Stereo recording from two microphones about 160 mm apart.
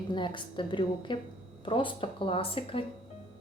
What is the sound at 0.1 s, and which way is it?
A woman's voice, 30° left (ahead or behind).